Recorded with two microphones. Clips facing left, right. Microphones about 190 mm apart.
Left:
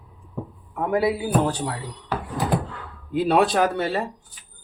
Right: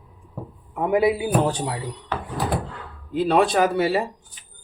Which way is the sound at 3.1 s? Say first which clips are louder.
Even; 5° left (ahead or behind).